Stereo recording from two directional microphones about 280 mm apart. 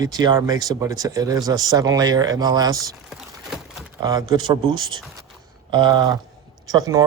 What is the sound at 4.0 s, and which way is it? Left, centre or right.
Speech, centre.